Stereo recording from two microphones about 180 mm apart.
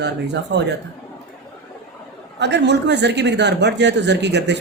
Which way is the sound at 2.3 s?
70° right (ahead or behind).